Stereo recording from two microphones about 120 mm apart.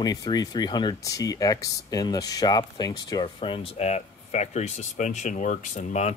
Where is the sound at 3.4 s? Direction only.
45° left (ahead or behind).